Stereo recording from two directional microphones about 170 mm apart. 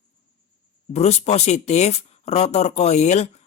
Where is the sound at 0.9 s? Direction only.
40° left (ahead or behind).